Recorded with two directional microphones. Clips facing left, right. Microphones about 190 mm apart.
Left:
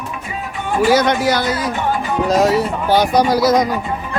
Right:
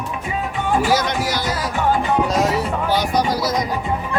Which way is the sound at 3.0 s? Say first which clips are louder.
Left 9 dB; 70° left (ahead or behind).